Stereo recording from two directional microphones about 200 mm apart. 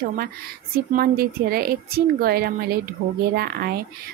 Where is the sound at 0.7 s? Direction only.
50° right (ahead or behind).